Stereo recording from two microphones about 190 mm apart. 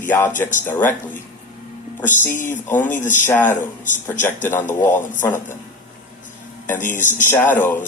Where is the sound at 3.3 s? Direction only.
10° left (ahead or behind).